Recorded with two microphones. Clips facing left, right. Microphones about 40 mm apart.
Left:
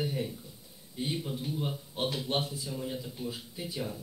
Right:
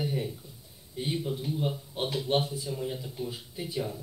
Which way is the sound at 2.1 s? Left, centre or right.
Right.